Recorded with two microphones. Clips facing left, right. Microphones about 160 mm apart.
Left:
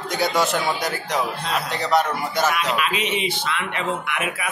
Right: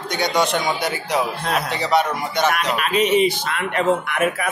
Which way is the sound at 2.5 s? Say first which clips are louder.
Right 3 dB; 45° right (ahead or behind).